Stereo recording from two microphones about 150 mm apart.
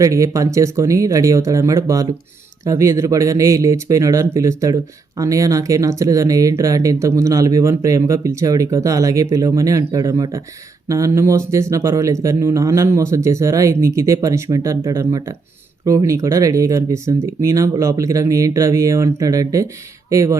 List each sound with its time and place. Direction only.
0.0 s speech: 20° right (ahead or behind)